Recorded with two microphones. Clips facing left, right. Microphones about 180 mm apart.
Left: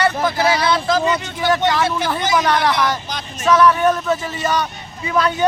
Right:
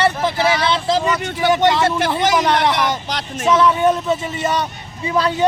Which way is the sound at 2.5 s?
20° right (ahead or behind).